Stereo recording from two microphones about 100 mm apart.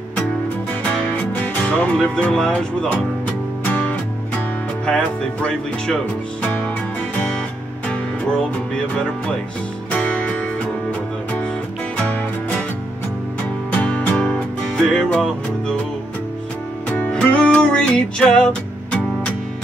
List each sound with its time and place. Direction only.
0.8 s music: 15° left (ahead or behind)
4.8 s speech: 10° left (ahead or behind)
6.4 s music: 15° left (ahead or behind)
9.8 s music: 15° left (ahead or behind)
13.7 s music: 15° left (ahead or behind)
14.8 s speech: 5° left (ahead or behind)
16.9 s music: 10° left (ahead or behind)